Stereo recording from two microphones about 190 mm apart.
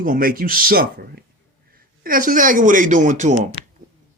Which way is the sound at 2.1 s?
45° right (ahead or behind).